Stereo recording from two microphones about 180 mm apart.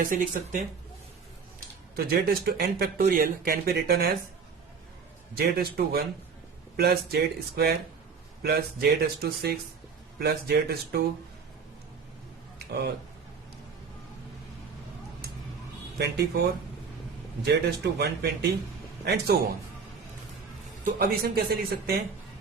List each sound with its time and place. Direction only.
0.0 s speech: 50° right (ahead or behind)
2.0 s speech: 55° right (ahead or behind)
5.4 s speech: 55° right (ahead or behind)
12.5 s a sound: 65° right (ahead or behind)
16.0 s speech: 65° right (ahead or behind)
20.8 s speech: 60° right (ahead or behind)